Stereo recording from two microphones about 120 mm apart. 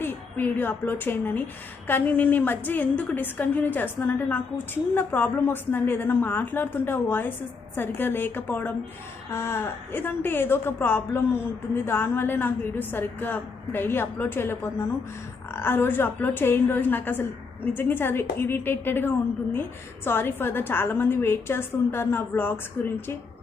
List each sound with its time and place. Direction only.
0.0 s a woman's voice: 15° left (ahead or behind)